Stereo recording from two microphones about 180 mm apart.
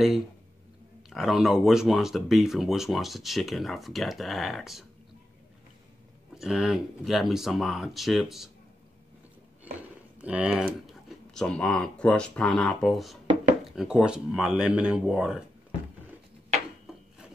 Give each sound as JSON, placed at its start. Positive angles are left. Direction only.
{"t": 1.1, "sound": "speech", "side_deg": 0}
{"t": 6.3, "sound": "speech", "side_deg": 0}
{"t": 10.2, "sound": "speech", "side_deg": -5}